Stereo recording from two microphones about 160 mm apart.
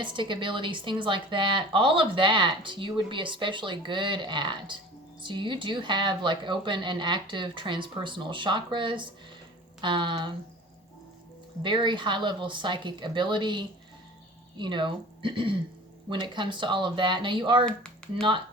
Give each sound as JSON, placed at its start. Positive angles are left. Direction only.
{"t": 0.0, "sound": "speech", "side_deg": -30}
{"t": 11.6, "sound": "speech", "side_deg": -30}
{"t": 17.7, "sound": "speech", "side_deg": 5}
{"t": 18.2, "sound": "speech", "side_deg": -30}